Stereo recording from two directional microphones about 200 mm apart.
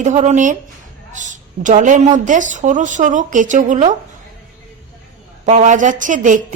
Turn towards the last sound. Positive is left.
turn(degrees=-40)  # may be behind; listen again after turning